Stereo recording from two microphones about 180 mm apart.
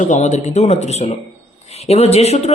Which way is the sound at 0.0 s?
40° left (ahead or behind).